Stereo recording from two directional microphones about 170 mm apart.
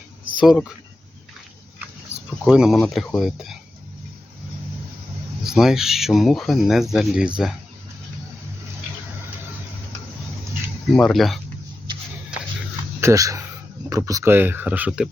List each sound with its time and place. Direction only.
0.3 s speech: centre (ahead or behind)
2.4 s speech: 5° right (ahead or behind)
5.5 s speech: centre (ahead or behind)
10.9 s speech: centre (ahead or behind)
13.0 s speech: 20° right (ahead or behind)